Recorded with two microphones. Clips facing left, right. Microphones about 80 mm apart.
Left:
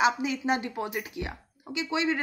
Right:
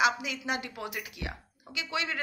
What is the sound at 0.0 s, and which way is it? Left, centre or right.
A woman's voice, left.